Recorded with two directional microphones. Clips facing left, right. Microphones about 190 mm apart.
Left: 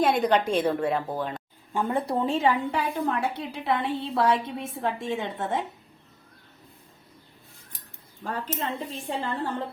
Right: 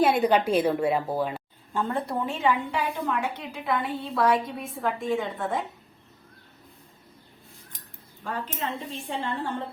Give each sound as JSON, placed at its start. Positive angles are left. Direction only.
{"t": 0.0, "sound": "a woman's voice", "side_deg": -5}
{"t": 1.7, "sound": "speech", "side_deg": 15}
{"t": 2.0, "sound": "a woman's voice", "side_deg": 30}
{"t": 8.2, "sound": "speech", "side_deg": 40}